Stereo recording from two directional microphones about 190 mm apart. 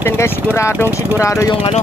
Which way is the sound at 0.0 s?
15° left (ahead or behind).